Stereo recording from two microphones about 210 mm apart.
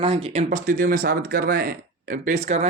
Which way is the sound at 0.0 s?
30° right (ahead or behind).